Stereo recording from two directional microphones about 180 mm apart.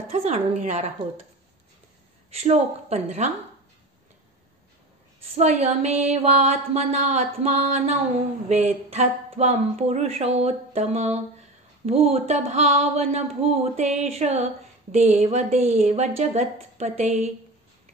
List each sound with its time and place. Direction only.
0.1 s speech: 35° right (ahead or behind)
2.3 s speech: 40° right (ahead or behind)
5.3 s speech: 35° right (ahead or behind)